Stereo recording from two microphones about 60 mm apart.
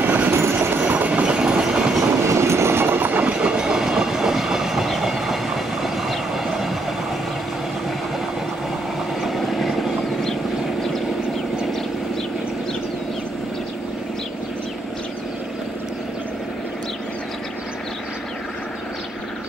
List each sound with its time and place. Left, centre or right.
0.0 s train: right
0.3 s train: right
0.6 s train: right
2.2 s train: right; by 6.8 s centre
9.2 s vehicle: centre